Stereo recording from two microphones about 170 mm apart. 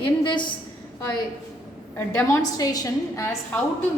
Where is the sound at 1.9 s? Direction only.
15° left (ahead or behind).